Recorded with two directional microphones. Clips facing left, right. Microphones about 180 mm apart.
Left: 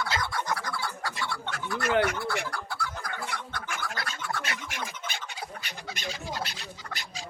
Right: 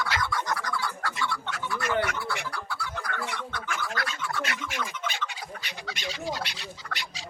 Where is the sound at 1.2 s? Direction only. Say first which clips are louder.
Right 2 dB; 45° left (ahead or behind).